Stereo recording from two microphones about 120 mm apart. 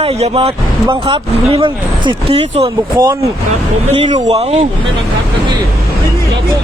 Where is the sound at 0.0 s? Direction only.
55° right (ahead or behind).